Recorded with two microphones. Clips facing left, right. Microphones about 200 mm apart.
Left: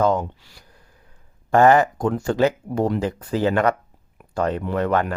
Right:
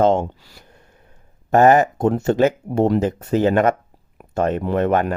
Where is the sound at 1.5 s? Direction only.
20° right (ahead or behind).